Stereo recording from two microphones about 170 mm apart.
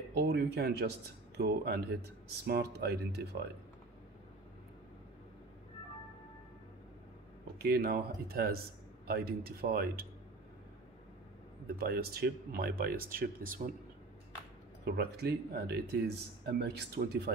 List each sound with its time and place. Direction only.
0.1 s speech: 75° right (ahead or behind)
7.6 s speech: 65° right (ahead or behind)
11.8 s speech: 65° right (ahead or behind)
14.9 s speech: 70° right (ahead or behind)